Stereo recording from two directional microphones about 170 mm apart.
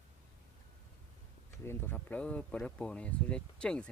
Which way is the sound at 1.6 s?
10° left (ahead or behind).